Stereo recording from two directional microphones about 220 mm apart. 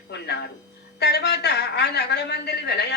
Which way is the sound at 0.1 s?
50° left (ahead or behind).